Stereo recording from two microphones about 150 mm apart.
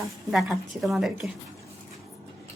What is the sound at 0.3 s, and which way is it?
Speech, centre (ahead or behind).